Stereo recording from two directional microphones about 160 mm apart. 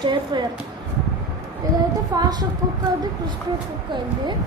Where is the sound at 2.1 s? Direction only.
25° right (ahead or behind).